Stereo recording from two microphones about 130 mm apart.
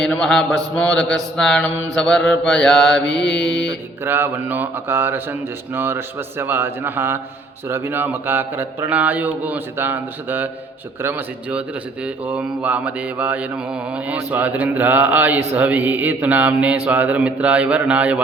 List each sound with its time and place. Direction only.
0.0 s mantra: 5° left (ahead or behind)
4.0 s speech: 15° right (ahead or behind)